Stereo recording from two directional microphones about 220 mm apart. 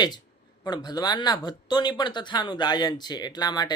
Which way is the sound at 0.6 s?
20° left (ahead or behind).